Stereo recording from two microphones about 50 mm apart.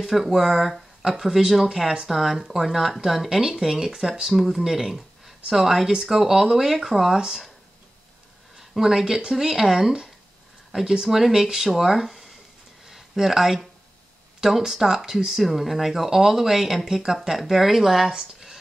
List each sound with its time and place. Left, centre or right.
0.0 s speech: centre
8.5 s speech: centre
12.8 s a sound: centre
14.4 s speech: centre